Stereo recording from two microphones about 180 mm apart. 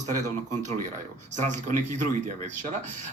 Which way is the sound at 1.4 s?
40° right (ahead or behind).